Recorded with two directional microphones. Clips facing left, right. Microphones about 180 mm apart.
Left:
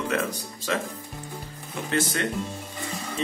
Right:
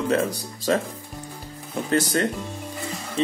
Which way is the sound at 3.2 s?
35° right (ahead or behind).